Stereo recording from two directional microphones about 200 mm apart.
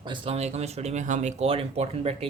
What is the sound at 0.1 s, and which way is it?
Speech, 30° right (ahead or behind).